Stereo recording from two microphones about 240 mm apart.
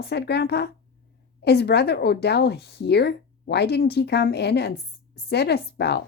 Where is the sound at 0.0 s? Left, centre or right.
Left.